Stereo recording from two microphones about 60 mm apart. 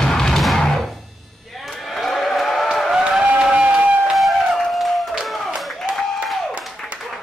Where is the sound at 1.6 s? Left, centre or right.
Centre.